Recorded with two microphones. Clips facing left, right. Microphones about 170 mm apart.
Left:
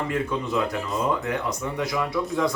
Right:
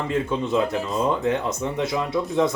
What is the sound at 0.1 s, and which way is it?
Speech, 25° right (ahead or behind).